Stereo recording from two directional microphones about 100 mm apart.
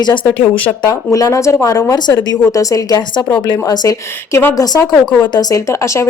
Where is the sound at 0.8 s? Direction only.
30° left (ahead or behind).